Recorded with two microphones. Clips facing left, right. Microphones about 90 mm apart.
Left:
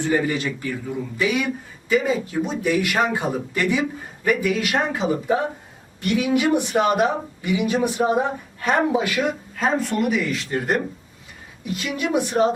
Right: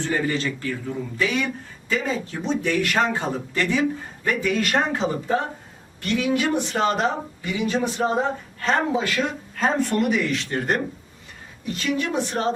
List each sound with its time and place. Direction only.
0.0 s speech: 15° left (ahead or behind)